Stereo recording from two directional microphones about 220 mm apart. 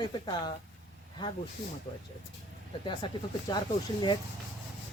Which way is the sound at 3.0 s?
20° left (ahead or behind).